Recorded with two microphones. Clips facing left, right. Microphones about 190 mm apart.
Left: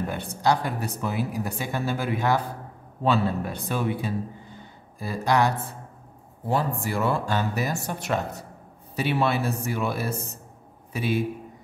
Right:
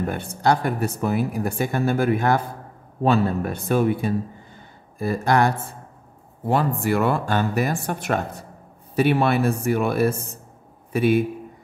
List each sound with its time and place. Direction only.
0.1 s speech: 50° right (ahead or behind)
6.5 s speech: 65° right (ahead or behind)